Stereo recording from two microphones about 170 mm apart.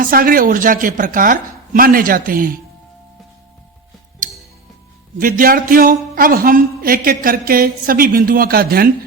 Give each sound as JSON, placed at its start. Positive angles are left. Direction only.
{"t": 0.0, "sound": "a man's voice", "side_deg": -55}
{"t": 5.1, "sound": "a man's voice", "side_deg": -55}